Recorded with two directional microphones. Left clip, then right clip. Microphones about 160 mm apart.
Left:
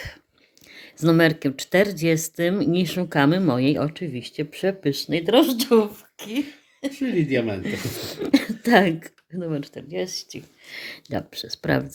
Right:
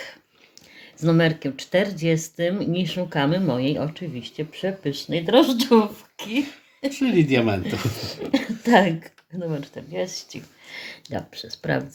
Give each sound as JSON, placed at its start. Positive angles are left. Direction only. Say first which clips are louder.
{"t": 0.8, "sound": "speech", "louder": "left 2 dB", "side_deg": 50}
{"t": 7.0, "sound": "speech", "louder": "right 3 dB", "side_deg": -30}
{"t": 7.6, "sound": "speech", "louder": "right 1 dB", "side_deg": 50}